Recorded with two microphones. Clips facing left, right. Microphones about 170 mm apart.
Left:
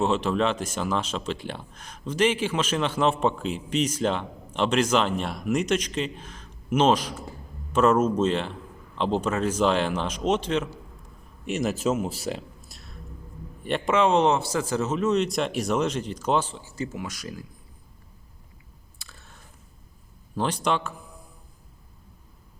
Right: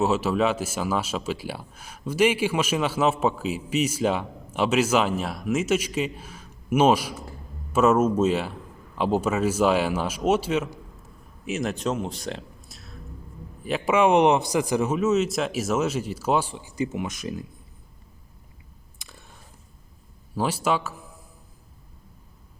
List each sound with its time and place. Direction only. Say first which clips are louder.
0.0 s speech: right 1 dB; 5° right (ahead or behind); by 17.4 s 20° right (ahead or behind)
19.0 s a sound: right 3 dB; 20° right (ahead or behind)
20.3 s a man's voice: right 1 dB; 5° right (ahead or behind)